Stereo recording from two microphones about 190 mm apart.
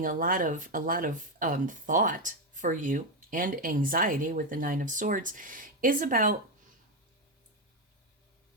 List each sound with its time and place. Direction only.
0.0 s speech: 45° right (ahead or behind)